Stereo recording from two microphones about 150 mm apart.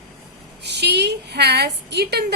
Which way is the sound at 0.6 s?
90° right.